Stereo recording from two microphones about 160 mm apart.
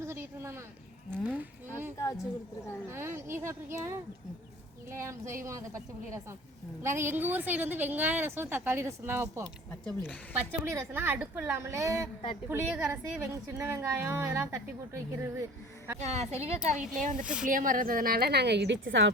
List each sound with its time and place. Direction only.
0.0 s a sound: 15° right (ahead or behind)
2.9 s a woman's voice: 15° right (ahead or behind)
6.8 s a woman's voice: 15° right (ahead or behind)
10.0 s speech: 10° left (ahead or behind)
10.7 s a woman's voice: 15° right (ahead or behind)
16.0 s a woman's voice: 45° right (ahead or behind); by 18.9 s 90° right